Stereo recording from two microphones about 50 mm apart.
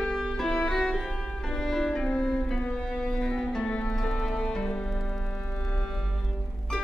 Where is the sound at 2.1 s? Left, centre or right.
Left.